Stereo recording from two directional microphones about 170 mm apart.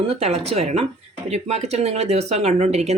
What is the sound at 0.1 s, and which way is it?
Speech, 35° right (ahead or behind).